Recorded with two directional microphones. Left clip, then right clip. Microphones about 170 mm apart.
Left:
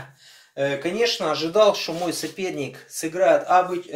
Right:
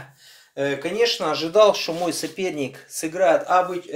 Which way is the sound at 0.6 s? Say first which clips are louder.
Right 1 dB; 40° right (ahead or behind).